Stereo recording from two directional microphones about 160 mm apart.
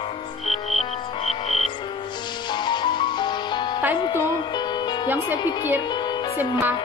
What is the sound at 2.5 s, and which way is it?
Music, 30° left (ahead or behind).